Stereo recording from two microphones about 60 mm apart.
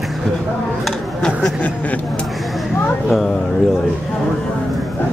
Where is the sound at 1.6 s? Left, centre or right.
Left.